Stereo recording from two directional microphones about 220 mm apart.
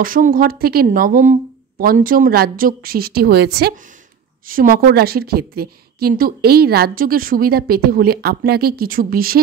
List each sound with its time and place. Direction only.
0.0 s a woman's voice: 40° right (ahead or behind)